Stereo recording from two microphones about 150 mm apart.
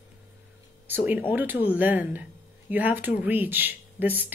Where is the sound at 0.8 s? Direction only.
10° right (ahead or behind).